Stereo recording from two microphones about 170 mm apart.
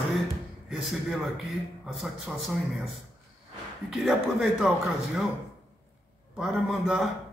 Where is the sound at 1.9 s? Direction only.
Centre (ahead or behind).